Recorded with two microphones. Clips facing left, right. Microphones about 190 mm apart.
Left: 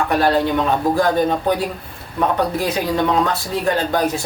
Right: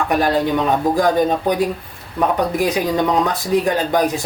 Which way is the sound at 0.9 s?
15° right (ahead or behind).